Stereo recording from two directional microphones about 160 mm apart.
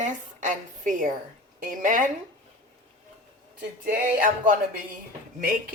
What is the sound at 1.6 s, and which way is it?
Music, 55° right (ahead or behind).